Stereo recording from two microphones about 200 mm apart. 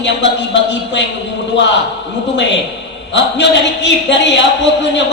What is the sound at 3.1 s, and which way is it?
Speech, 65° left (ahead or behind).